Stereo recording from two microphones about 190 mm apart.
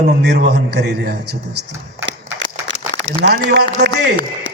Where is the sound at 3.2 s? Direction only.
60° right (ahead or behind).